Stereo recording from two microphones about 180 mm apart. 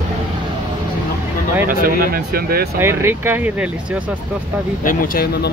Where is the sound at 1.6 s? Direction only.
50° right (ahead or behind).